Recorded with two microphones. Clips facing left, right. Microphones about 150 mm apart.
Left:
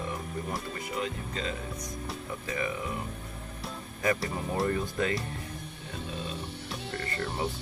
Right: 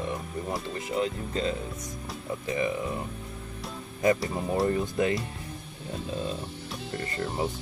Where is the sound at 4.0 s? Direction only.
25° right (ahead or behind).